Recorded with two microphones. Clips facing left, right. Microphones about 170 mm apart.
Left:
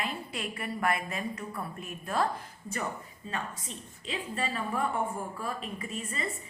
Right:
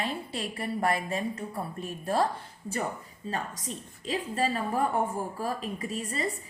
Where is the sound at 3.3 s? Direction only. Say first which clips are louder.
Right 3 dB; 40° right (ahead or behind).